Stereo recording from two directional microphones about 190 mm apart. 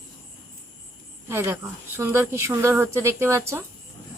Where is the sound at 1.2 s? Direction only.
10° right (ahead or behind).